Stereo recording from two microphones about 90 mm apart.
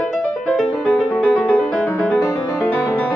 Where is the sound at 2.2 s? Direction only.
35° left (ahead or behind).